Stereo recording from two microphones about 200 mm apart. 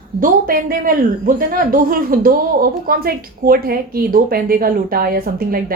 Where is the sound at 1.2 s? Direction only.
45° right (ahead or behind).